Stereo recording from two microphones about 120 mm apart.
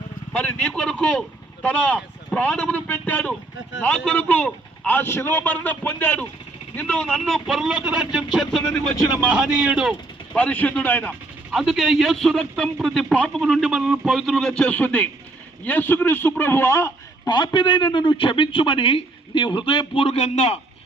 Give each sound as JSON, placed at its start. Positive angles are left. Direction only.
{"t": 0.3, "sound": "a man's voice", "side_deg": 10}
{"t": 9.1, "sound": "a man's voice", "side_deg": -10}
{"t": 10.3, "sound": "a man's voice", "side_deg": 10}
{"t": 11.5, "sound": "a man's voice", "side_deg": 0}
{"t": 17.2, "sound": "a man's voice", "side_deg": 40}